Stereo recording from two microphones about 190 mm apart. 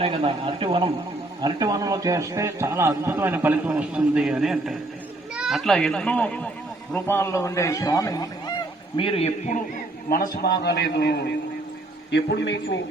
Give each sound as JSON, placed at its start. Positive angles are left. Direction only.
{"t": 0.0, "sound": "a man's voice", "side_deg": -30}
{"t": 9.0, "sound": "a man's voice", "side_deg": 30}
{"t": 10.4, "sound": "a man's voice", "side_deg": 60}